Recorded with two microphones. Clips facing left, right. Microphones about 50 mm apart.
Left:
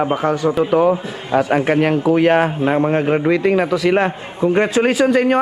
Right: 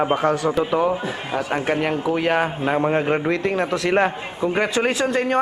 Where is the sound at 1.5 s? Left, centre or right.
Centre.